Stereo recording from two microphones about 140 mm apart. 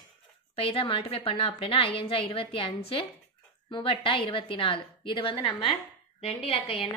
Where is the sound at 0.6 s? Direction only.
40° left (ahead or behind).